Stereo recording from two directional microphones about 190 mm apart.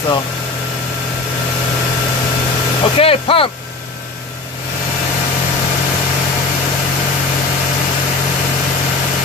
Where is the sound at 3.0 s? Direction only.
30° left (ahead or behind).